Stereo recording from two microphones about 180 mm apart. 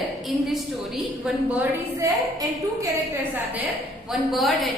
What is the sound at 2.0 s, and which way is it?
Speech, 20° right (ahead or behind).